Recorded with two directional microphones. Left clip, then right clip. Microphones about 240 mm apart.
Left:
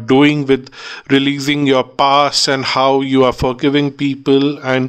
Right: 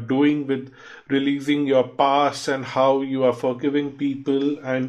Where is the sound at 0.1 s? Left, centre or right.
Left.